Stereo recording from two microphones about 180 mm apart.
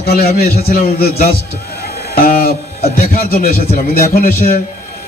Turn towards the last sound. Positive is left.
turn(degrees=50)  # may be behind; listen again after turning